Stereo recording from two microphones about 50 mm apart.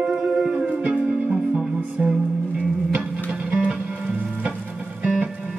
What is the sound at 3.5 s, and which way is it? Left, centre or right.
Music, right.